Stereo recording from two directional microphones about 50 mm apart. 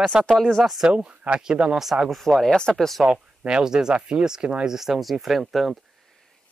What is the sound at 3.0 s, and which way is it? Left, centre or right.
Speech, centre.